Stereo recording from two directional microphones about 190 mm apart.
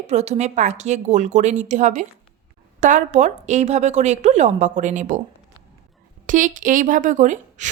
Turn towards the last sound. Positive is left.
turn(degrees=-40)  # may be behind; listen again after turning